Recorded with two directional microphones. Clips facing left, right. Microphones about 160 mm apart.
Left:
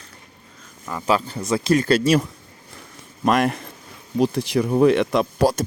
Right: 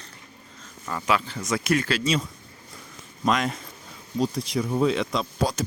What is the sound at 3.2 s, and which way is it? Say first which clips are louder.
Speech: left 5 dB; 55° left (ahead or behind).